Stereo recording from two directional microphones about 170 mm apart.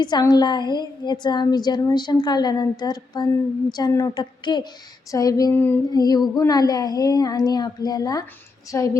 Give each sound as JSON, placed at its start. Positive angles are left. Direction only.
{"t": 0.0, "sound": "speech", "side_deg": 25}
{"t": 5.1, "sound": "female singing", "side_deg": 20}
{"t": 5.9, "sound": "speech", "side_deg": 25}